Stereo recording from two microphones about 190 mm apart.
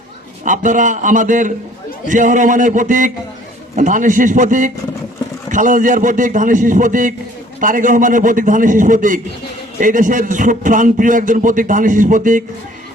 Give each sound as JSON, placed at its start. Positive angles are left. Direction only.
{"t": 0.4, "sound": "a man's voice", "side_deg": -40}